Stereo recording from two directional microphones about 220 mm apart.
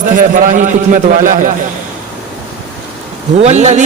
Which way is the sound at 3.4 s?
30° right (ahead or behind).